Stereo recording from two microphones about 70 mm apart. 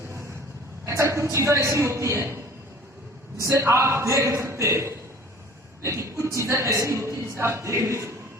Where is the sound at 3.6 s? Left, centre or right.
Right.